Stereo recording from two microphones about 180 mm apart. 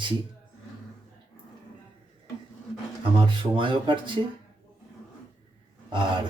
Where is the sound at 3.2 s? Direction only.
30° right (ahead or behind).